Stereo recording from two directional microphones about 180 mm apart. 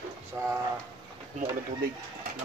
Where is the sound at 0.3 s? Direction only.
15° right (ahead or behind).